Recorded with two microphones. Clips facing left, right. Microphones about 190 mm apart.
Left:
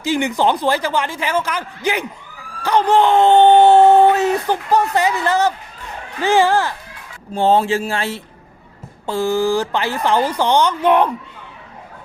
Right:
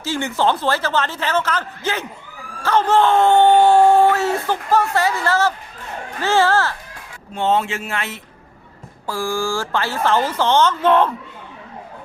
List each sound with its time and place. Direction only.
0.0 s speech: 15° left (ahead or behind)
7.3 s speech: 35° left (ahead or behind); by 11.1 s 15° left (ahead or behind)